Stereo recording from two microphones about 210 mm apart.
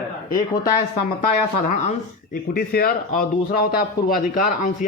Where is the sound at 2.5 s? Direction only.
45° left (ahead or behind).